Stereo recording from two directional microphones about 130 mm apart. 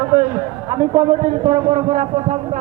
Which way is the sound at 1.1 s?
90° right.